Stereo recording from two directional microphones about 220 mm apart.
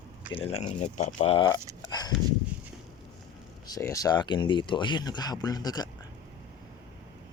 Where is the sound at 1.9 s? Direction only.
20° left (ahead or behind).